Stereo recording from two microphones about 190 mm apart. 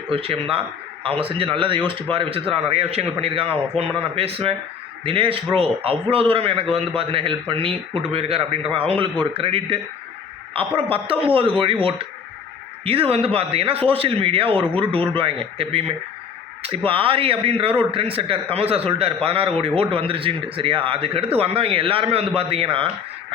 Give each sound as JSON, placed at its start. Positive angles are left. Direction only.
{"t": 0.1, "sound": "a man's voice", "side_deg": -30}
{"t": 10.8, "sound": "a man's voice", "side_deg": -30}